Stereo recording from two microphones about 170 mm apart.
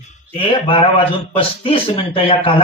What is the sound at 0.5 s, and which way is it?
Speech, 30° left (ahead or behind).